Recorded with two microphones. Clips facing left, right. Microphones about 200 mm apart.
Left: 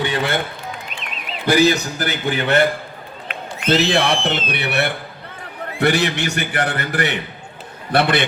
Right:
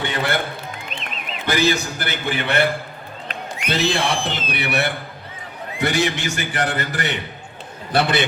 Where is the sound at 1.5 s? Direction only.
35° left (ahead or behind).